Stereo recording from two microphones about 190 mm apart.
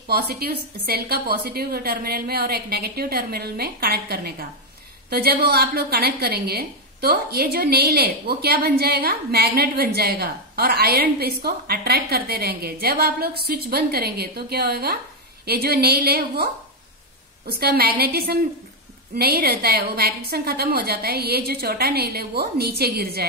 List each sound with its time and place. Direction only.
0.1 s a woman's voice: 55° right (ahead or behind)
17.5 s a woman's voice: 55° right (ahead or behind)